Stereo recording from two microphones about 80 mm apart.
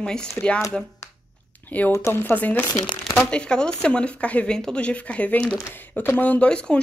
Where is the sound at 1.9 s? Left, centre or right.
Left.